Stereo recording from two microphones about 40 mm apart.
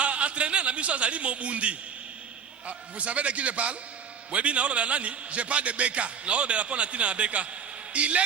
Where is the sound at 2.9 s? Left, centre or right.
Right.